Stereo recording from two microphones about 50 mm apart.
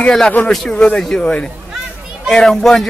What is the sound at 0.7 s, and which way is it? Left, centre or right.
A man's voice, left.